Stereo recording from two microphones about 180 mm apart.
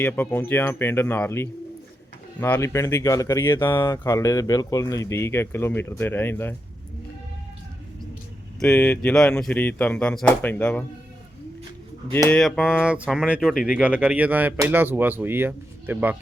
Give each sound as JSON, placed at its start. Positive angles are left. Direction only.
{"t": 0.0, "sound": "speech", "side_deg": 10}
{"t": 8.5, "sound": "speech", "side_deg": 10}
{"t": 12.3, "sound": "speech", "side_deg": 5}